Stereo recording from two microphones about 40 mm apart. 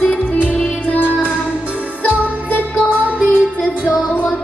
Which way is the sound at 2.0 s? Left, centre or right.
Left.